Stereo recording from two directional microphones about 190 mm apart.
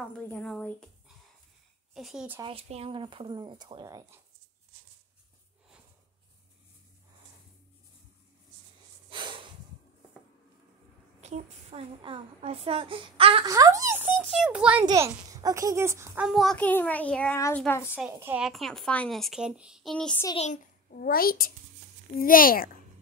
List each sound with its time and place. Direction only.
0.2 s a child's voice: 5° left (ahead or behind)
2.0 s speech: centre (ahead or behind)
2.4 s a woman's voice: 30° right (ahead or behind)
9.1 s snort: 25° right (ahead or behind)
11.1 s a woman's voice: 35° right (ahead or behind)
13.5 s a child's voice: 20° right (ahead or behind)
14.1 s speech: centre (ahead or behind)
14.9 s a child's voice: 20° right (ahead or behind)
16.3 s a child's voice: centre (ahead or behind)
17.9 s speech: 10° right (ahead or behind)
20.3 s a child's voice: 40° left (ahead or behind)